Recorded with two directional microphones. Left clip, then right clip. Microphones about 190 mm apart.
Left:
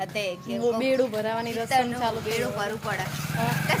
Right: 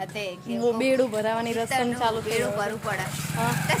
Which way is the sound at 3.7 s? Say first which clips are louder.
Even; 10° left (ahead or behind).